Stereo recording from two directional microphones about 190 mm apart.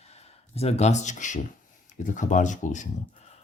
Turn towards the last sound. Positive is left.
turn(degrees=40)  # may be behind; listen again after turning